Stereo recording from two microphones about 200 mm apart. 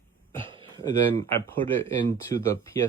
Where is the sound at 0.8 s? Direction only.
15° left (ahead or behind).